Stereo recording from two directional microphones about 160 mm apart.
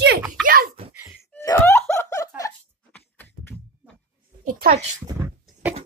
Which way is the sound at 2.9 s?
10° left (ahead or behind).